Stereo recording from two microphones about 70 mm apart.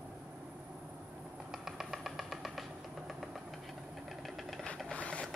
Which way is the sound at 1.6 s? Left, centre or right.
Centre.